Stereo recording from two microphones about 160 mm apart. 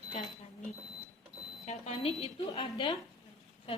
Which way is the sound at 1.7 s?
40° left (ahead or behind).